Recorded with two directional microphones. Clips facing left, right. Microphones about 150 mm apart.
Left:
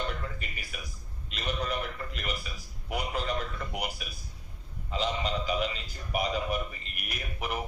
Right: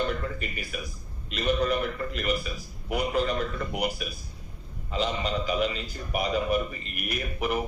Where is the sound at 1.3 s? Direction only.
20° left (ahead or behind).